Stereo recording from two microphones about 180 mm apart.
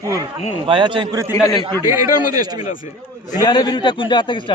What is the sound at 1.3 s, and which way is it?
Speech, 20° left (ahead or behind).